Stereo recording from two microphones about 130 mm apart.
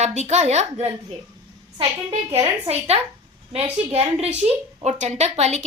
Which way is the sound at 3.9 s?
50° right (ahead or behind).